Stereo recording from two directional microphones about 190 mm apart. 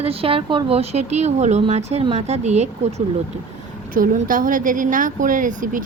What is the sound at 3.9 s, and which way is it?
Speech, 45° right (ahead or behind).